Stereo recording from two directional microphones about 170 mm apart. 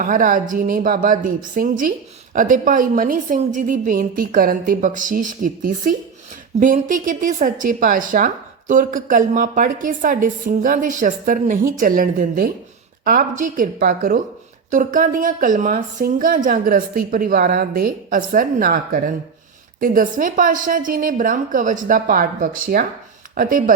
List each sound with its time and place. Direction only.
0.0 s a woman's voice: 50° right (ahead or behind)